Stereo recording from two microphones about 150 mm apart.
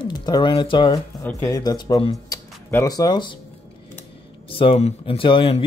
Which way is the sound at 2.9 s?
30° left (ahead or behind).